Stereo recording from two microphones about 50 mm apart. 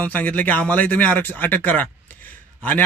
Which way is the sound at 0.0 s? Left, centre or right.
Left.